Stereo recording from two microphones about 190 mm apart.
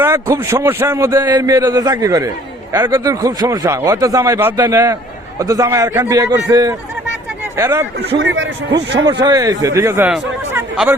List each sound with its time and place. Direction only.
0.0 s a man's voice: 10° right (ahead or behind)
8.2 s speech: 75° right (ahead or behind)
9.2 s a man's voice: 20° right (ahead or behind)